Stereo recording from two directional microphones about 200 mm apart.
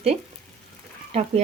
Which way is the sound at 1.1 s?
35° right (ahead or behind).